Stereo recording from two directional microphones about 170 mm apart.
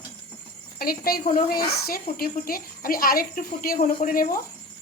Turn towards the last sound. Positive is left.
turn(degrees=55)  # may be behind; listen again after turning